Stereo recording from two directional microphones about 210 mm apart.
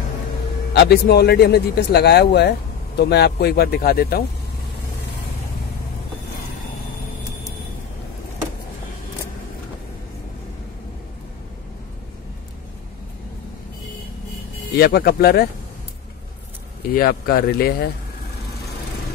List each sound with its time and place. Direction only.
0.7 s speech: 50° left (ahead or behind)
14.8 s speech: 45° left (ahead or behind)
16.9 s speech: 45° left (ahead or behind)